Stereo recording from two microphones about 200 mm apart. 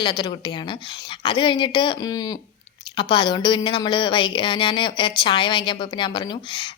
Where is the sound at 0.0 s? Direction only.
20° left (ahead or behind).